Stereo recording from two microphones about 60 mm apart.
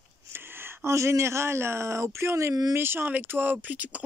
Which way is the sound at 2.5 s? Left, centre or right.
Right.